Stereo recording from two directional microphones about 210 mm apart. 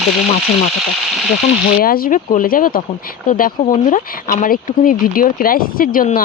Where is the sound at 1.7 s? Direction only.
45° left (ahead or behind).